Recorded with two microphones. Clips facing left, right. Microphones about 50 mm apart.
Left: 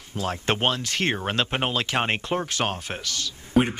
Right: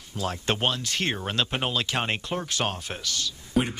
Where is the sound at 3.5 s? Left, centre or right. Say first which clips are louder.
Left 5 dB; left.